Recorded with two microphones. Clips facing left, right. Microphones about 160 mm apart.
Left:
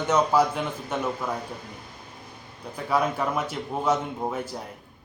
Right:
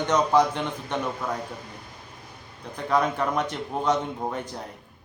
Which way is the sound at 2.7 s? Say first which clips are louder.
Right 1 dB; 5° left (ahead or behind).